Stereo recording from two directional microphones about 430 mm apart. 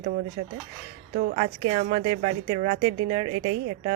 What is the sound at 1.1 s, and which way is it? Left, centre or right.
Speech, centre.